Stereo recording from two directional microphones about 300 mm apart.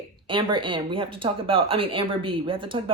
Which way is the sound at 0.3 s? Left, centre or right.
Centre.